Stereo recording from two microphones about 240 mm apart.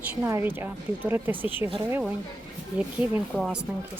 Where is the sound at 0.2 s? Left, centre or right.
Centre.